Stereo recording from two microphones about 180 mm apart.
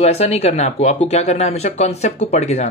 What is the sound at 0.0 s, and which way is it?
Speech, 35° left (ahead or behind).